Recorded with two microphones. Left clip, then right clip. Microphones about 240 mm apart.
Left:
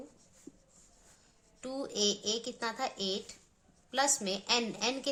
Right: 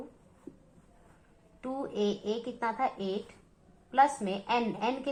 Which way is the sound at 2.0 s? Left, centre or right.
Left.